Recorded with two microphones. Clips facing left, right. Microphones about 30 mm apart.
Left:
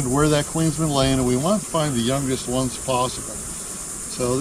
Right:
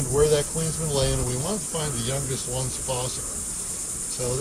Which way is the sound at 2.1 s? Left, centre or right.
Left.